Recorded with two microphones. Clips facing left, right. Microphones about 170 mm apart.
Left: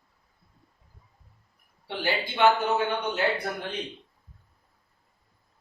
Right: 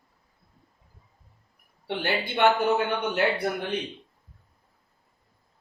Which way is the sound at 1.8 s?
60° right (ahead or behind).